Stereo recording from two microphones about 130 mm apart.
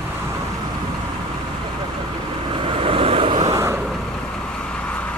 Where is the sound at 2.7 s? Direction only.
45° right (ahead or behind).